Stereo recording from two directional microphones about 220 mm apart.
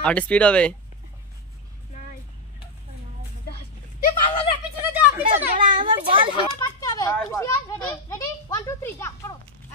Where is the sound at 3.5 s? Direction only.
40° left (ahead or behind).